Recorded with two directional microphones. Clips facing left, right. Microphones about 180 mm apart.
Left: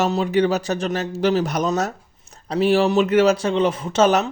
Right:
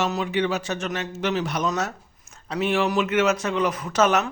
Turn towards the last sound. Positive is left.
turn(degrees=30)  # may be behind; listen again after turning